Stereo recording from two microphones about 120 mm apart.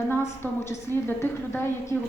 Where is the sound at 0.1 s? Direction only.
20° left (ahead or behind).